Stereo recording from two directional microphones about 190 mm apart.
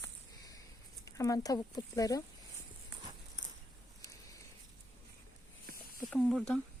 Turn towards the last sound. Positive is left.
turn(degrees=5)  # may be behind; listen again after turning